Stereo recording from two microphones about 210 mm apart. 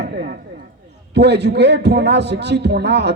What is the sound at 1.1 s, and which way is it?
A man's voice, 55° right (ahead or behind).